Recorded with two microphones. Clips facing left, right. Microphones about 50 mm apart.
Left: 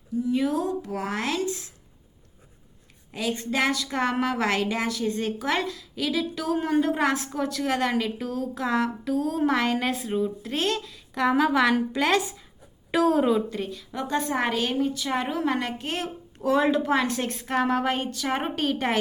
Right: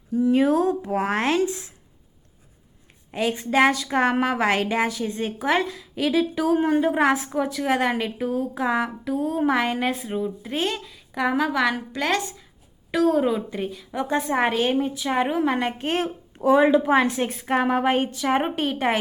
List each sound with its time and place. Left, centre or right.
0.2 s speech: right
3.1 s a woman's voice: right; by 13.6 s centre
13.6 s a woman's voice: centre
14.3 s a woman's voice: right
16.5 s a woman's voice: centre